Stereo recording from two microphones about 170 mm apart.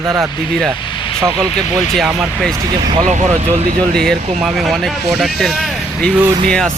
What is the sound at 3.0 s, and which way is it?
Speech, 45° right (ahead or behind).